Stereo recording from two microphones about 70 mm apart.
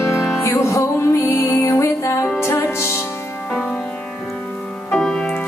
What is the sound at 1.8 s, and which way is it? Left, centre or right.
Music, left.